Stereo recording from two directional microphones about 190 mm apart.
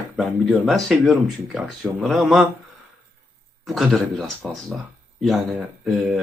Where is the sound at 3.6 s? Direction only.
Centre (ahead or behind).